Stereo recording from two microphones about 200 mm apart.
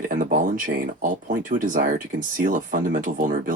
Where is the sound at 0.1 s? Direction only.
45° right (ahead or behind).